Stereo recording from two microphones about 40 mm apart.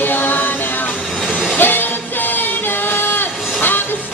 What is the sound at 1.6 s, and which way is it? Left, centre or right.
Music, left.